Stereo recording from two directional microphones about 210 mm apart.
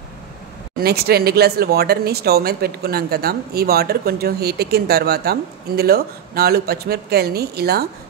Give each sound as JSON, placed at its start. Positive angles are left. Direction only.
{"t": 0.7, "sound": "speech", "side_deg": -50}